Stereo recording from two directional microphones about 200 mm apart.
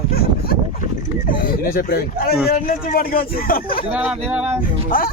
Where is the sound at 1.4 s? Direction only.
45° left (ahead or behind).